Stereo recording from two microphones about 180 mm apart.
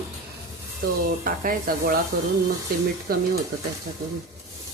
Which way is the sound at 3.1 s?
55° right (ahead or behind).